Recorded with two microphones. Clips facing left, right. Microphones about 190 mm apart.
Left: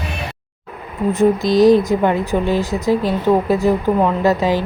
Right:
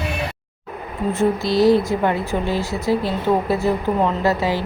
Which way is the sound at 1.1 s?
15° left (ahead or behind).